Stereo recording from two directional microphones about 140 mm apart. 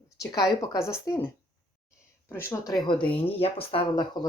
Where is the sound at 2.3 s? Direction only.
20° left (ahead or behind).